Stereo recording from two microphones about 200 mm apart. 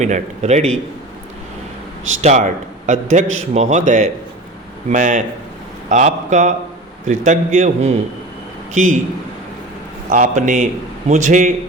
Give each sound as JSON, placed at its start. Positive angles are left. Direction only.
{"t": 0.0, "sound": "a man's voice", "side_deg": -35}
{"t": 2.2, "sound": "a man's voice", "side_deg": -35}
{"t": 10.1, "sound": "a man's voice", "side_deg": -40}